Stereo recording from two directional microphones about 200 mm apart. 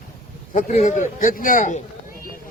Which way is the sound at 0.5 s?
35° left (ahead or behind).